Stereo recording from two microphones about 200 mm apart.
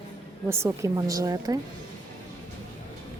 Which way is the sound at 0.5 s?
15° right (ahead or behind).